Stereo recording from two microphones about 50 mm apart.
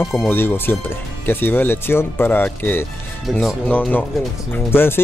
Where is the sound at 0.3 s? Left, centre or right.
Left.